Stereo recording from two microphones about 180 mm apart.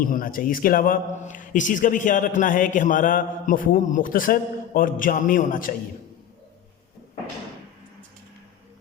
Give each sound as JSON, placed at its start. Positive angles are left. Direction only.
{"t": 0.0, "sound": "a man's voice", "side_deg": 50}